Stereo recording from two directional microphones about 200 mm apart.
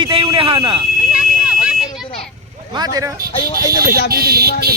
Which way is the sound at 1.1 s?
5° right (ahead or behind).